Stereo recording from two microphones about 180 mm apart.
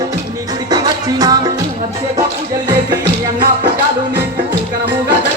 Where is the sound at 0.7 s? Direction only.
20° right (ahead or behind).